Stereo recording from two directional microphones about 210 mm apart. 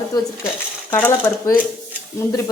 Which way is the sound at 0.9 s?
10° left (ahead or behind).